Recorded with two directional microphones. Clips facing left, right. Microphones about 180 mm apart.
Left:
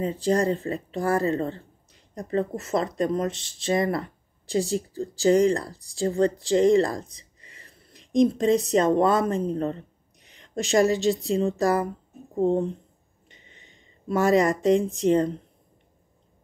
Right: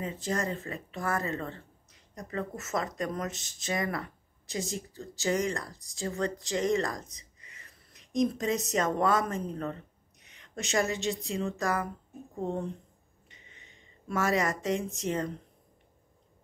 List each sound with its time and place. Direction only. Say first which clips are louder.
0.0 s speech: left 9 dB; 35° left (ahead or behind)